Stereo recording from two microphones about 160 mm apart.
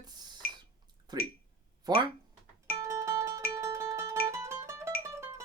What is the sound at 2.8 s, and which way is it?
Music, 20° right (ahead or behind).